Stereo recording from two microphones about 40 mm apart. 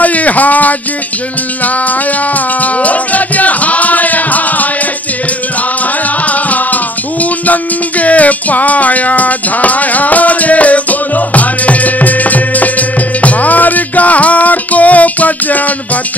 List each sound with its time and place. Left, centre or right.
0.0 s a sound: left
2.6 s music: left
6.2 s music: left